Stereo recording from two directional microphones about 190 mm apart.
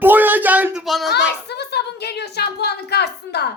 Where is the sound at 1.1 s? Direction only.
60° left (ahead or behind).